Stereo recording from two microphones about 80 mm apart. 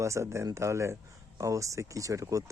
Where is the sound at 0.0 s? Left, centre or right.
Right.